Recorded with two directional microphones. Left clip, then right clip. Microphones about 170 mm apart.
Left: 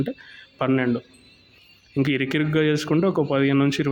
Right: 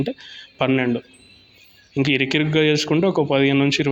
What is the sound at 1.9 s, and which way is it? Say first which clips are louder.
Speech: right 4 dB; 15° left (ahead or behind).